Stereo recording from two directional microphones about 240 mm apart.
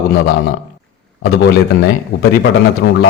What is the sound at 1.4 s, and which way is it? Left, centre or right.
A man's voice, left.